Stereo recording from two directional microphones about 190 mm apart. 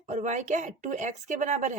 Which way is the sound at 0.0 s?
40° right (ahead or behind).